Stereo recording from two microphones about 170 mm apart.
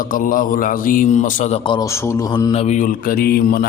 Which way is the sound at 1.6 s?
30° left (ahead or behind).